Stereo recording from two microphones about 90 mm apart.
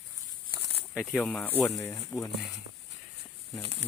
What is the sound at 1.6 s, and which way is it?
Speech, 30° left (ahead or behind).